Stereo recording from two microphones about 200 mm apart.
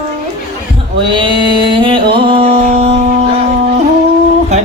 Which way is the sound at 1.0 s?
25° right (ahead or behind).